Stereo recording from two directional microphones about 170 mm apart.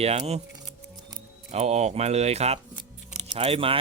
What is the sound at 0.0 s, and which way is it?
Speech, 35° right (ahead or behind).